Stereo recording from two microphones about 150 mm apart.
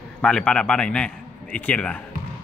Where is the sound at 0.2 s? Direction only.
5° left (ahead or behind).